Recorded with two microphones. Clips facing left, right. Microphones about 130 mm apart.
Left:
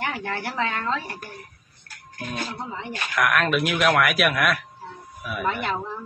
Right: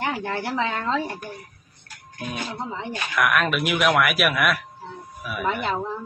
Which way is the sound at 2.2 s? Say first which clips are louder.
Even; 15° right (ahead or behind).